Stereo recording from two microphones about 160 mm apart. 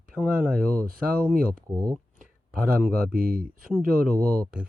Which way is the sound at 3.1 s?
65° right (ahead or behind).